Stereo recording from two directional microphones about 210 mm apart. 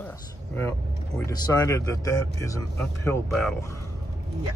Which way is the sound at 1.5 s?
15° left (ahead or behind).